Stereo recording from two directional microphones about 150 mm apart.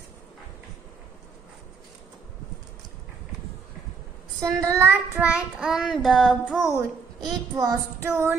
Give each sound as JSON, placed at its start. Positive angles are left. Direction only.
{"t": 4.6, "sound": "child singing", "side_deg": -15}
{"t": 6.7, "sound": "a woman's voice", "side_deg": -25}